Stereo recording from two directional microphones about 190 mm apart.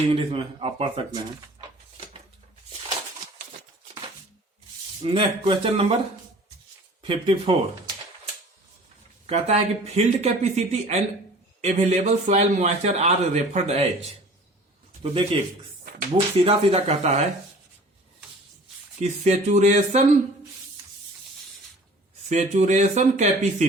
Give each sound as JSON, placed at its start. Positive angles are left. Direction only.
{"t": 0.1, "sound": "speech", "side_deg": -30}
{"t": 5.0, "sound": "speech", "side_deg": -25}
{"t": 7.0, "sound": "speech", "side_deg": -25}
{"t": 9.2, "sound": "a man's voice", "side_deg": -35}
{"t": 15.0, "sound": "a man's voice", "side_deg": -30}
{"t": 19.0, "sound": "a man's voice", "side_deg": -35}
{"t": 22.3, "sound": "a man's voice", "side_deg": -40}